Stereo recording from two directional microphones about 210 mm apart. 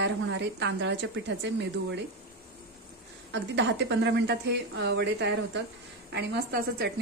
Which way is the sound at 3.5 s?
55° right (ahead or behind).